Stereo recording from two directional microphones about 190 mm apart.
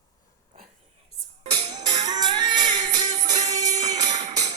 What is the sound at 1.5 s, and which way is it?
Music, 25° right (ahead or behind).